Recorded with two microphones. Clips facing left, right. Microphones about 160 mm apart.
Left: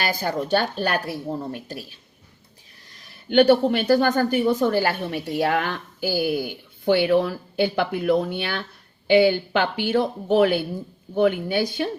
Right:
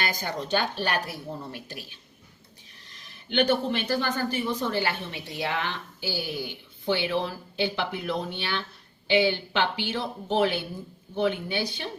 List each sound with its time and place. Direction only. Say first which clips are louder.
0.3 s speech: left 6 dB; 45° left (ahead or behind)
4.6 s speech: left 7 dB; 40° left (ahead or behind)